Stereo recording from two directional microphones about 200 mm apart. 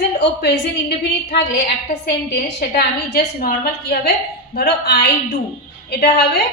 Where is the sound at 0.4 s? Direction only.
55° left (ahead or behind).